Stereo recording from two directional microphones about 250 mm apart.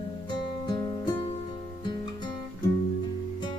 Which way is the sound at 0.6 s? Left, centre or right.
Centre.